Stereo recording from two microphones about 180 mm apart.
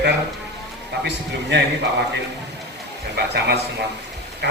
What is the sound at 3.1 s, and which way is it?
Speech, 70° right (ahead or behind).